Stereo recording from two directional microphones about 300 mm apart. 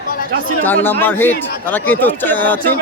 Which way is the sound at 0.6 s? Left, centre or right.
Centre.